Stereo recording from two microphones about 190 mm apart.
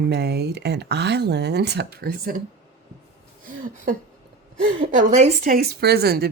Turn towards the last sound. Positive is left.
turn(degrees=-55)  # may be behind; listen again after turning